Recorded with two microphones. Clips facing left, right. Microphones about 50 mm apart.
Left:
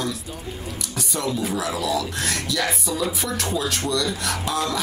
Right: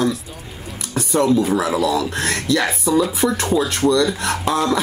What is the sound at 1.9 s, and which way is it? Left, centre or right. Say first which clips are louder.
Speech: right 5 dB; right.